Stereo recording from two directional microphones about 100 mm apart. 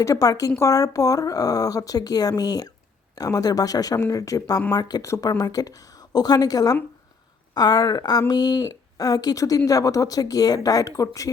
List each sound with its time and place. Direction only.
0.0 s a woman's voice: 35° left (ahead or behind)